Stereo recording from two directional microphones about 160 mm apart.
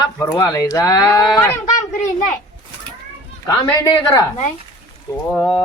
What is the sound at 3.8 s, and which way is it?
Speech, 20° left (ahead or behind).